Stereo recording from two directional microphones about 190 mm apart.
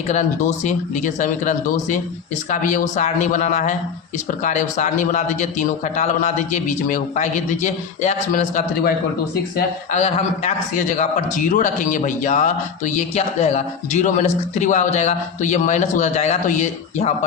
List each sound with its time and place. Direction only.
0.1 s a man's voice: 40° left (ahead or behind)
9.9 s a man's voice: 35° left (ahead or behind)